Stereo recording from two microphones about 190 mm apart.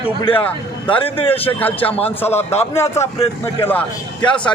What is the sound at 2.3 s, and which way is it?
Speech, 35° left (ahead or behind).